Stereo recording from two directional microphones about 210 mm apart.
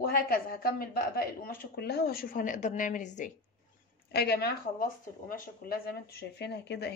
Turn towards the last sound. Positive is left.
turn(degrees=55)  # may be behind; listen again after turning